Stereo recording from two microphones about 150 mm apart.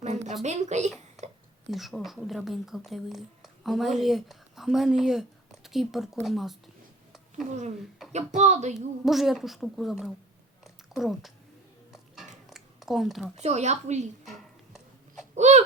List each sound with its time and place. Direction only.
0.0 s a sound: 50° right (ahead or behind)
0.4 s a woman's voice: 50° right (ahead or behind)
1.7 s a woman's voice: centre (ahead or behind)
8.1 s a woman's voice: 50° right (ahead or behind)
9.0 s speech: centre (ahead or behind)
10.6 s a sound: centre (ahead or behind)
13.3 s a woman's voice: 50° right (ahead or behind)
14.3 s music: centre (ahead or behind)
15.4 s baby cry: 50° right (ahead or behind)